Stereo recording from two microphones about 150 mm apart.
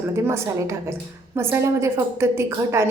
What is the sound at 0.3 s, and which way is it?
A woman's voice, 15° right (ahead or behind).